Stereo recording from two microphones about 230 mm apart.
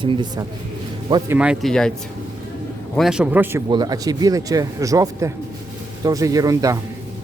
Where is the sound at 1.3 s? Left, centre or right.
Centre.